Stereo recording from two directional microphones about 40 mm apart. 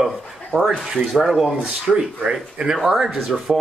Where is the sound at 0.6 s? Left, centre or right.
Centre.